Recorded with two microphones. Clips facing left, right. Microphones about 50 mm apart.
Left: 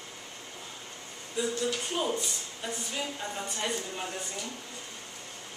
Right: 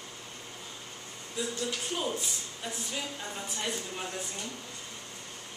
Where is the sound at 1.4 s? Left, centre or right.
Centre.